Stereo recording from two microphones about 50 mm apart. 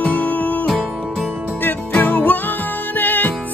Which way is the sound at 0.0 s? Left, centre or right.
Left.